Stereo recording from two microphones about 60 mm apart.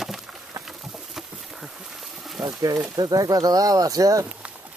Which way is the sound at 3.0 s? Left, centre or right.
Right.